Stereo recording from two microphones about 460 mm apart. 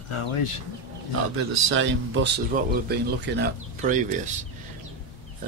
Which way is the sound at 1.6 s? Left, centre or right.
Right.